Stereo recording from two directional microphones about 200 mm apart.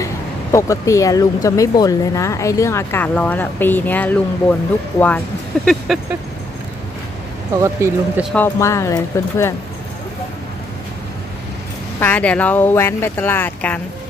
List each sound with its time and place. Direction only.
0.0 s speech: 15° left (ahead or behind)
5.5 s a sound: centre (ahead or behind)
7.8 s speech: 15° right (ahead or behind)
8.4 s speech: 15° left (ahead or behind)
12.0 s speech: 5° left (ahead or behind)